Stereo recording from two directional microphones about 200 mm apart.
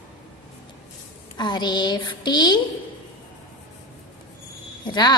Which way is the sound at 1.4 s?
20° left (ahead or behind).